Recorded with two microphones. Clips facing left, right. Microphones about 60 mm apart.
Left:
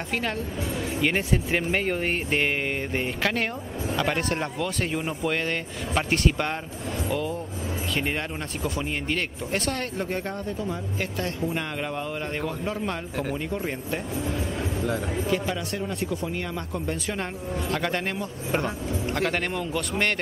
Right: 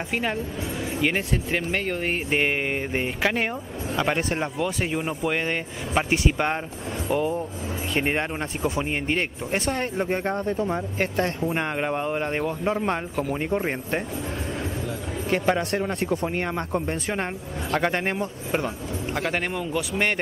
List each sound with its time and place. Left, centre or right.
0.1 s speech: centre
1.0 s speech: centre
2.3 s speech: centre; by 14.0 s right
15.2 s speech: right
17.6 s a man's voice: right
18.5 s speech: centre